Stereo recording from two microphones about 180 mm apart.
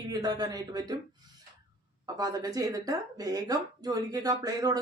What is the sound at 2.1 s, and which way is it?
A woman's voice, 20° right (ahead or behind).